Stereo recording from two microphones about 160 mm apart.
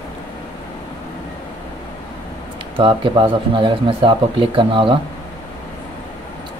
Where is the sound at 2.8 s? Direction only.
30° right (ahead or behind).